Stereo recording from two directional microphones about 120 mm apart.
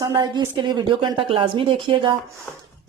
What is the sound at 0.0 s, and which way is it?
Speech, 35° right (ahead or behind).